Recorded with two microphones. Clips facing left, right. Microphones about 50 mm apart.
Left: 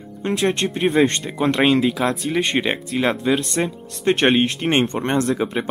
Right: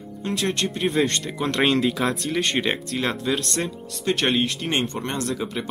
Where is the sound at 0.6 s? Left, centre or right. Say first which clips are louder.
Left 4 dB; left.